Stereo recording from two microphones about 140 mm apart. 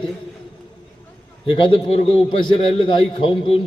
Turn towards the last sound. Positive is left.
turn(degrees=40)  # may be behind; listen again after turning